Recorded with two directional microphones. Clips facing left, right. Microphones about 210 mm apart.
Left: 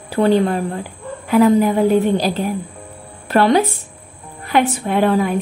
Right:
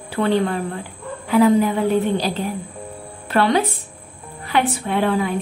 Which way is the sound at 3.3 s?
40° left (ahead or behind).